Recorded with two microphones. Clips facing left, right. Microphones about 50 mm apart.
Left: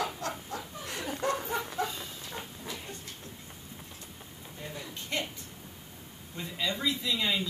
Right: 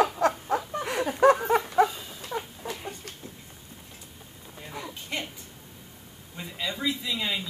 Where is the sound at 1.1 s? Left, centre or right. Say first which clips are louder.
Right 12 dB; right.